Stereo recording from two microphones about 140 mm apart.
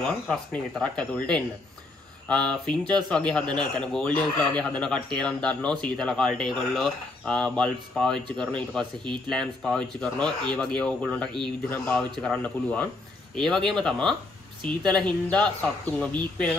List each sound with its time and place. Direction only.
0.0 s speech: 5° left (ahead or behind)